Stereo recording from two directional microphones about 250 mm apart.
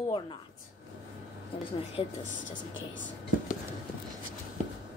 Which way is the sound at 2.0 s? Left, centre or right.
Left.